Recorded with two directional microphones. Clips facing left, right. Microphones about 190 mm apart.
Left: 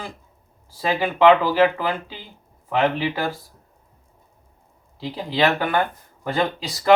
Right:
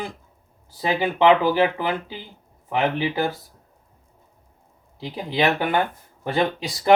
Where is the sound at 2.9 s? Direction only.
15° right (ahead or behind).